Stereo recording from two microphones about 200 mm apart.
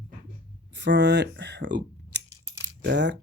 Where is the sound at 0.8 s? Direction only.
60° right (ahead or behind).